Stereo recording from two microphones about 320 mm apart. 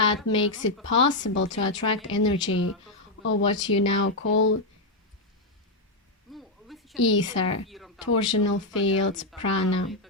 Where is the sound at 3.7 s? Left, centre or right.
Left.